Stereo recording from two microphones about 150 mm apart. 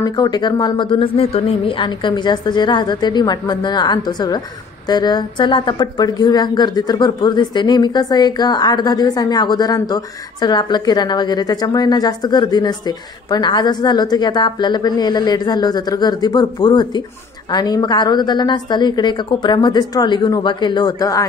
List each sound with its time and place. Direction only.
0.0 s a woman's voice: 25° left (ahead or behind)